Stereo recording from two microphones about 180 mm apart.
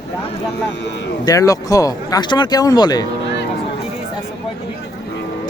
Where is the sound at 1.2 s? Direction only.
20° left (ahead or behind).